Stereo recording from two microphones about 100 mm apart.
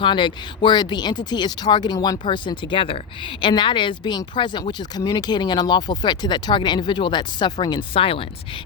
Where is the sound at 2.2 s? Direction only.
55° left (ahead or behind).